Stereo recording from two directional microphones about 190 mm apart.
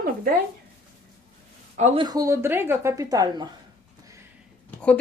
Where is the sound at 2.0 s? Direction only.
20° right (ahead or behind).